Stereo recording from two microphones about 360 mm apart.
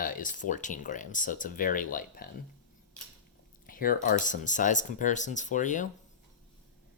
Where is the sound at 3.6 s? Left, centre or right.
Left.